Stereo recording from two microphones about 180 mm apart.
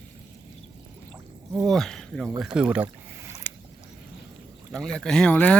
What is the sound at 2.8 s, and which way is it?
Boat, 15° right (ahead or behind).